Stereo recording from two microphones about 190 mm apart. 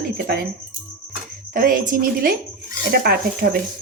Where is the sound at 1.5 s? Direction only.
45° right (ahead or behind).